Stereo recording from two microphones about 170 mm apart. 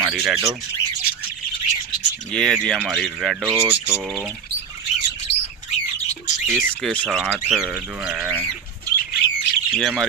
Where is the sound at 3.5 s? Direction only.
10° right (ahead or behind).